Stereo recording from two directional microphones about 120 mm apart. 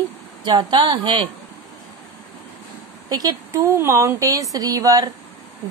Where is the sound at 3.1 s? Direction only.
30° right (ahead or behind).